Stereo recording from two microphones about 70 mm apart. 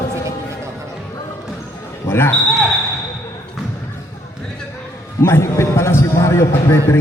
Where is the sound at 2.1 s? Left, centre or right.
Left.